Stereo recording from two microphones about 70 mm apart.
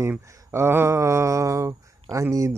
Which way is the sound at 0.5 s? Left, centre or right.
Right.